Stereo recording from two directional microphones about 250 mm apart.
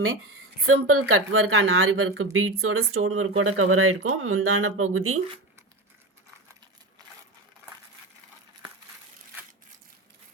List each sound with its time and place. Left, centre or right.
0.7 s speech: right